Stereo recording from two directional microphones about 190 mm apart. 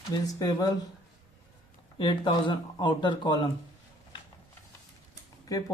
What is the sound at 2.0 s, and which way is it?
Speech, 25° left (ahead or behind).